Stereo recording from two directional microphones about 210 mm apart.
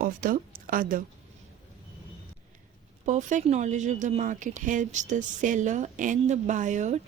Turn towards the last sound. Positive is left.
turn(degrees=-35)  # may be behind; listen again after turning